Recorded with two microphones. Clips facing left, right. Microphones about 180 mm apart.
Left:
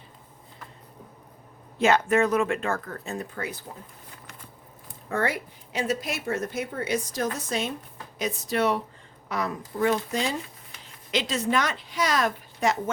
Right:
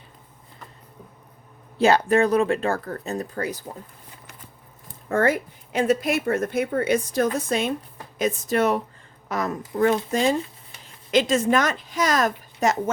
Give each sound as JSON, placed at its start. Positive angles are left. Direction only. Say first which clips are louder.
{"t": 1.8, "sound": "speech", "louder": "right 3 dB", "side_deg": -35}
{"t": 5.0, "sound": "a woman's voice", "louder": "right 6 dB", "side_deg": -45}